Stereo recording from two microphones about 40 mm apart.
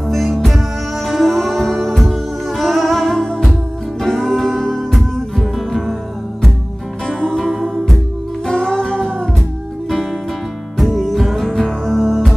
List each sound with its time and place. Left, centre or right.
0.1 s music: centre
7.1 s music: centre
8.5 s music: left
10.8 s music: centre